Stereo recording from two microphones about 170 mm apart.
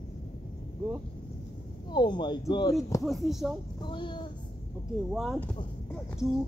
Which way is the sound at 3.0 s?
Centre (ahead or behind).